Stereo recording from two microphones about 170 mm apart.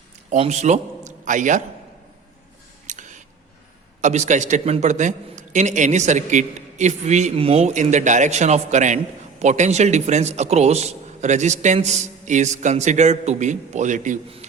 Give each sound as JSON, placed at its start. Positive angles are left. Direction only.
{"t": 0.3, "sound": "a man's voice", "side_deg": -40}
{"t": 2.8, "sound": "scissors", "side_deg": -45}
{"t": 4.0, "sound": "a man's voice", "side_deg": -45}